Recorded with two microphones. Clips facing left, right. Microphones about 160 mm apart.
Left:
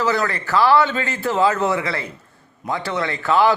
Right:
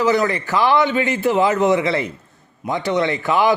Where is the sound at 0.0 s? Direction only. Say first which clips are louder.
Right 4 dB; 15° right (ahead or behind).